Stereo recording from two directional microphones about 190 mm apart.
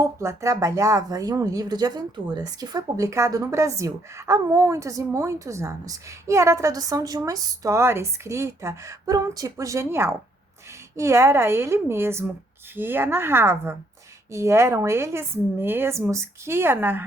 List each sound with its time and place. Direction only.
0.0 s a woman's voice: 15° right (ahead or behind)